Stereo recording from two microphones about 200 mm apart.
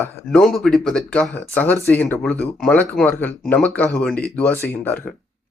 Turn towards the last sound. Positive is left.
turn(degrees=10)  # may be behind; listen again after turning